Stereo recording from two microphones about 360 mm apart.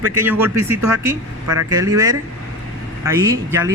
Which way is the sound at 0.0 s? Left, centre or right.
Centre.